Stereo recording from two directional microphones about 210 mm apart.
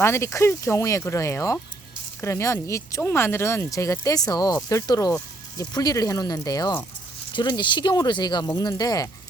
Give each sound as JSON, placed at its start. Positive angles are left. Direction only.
{"t": 0.0, "sound": "speech", "side_deg": 15}